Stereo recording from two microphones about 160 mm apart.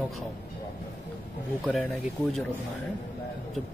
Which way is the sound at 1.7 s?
5° left (ahead or behind).